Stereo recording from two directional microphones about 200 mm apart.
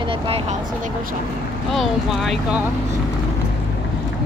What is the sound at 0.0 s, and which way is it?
Speech, 25° right (ahead or behind).